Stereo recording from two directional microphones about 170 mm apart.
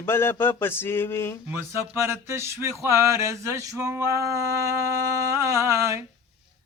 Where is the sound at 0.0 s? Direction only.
15° left (ahead or behind).